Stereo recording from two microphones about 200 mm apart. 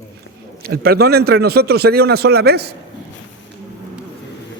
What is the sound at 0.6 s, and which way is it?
A man's voice, 50° right (ahead or behind).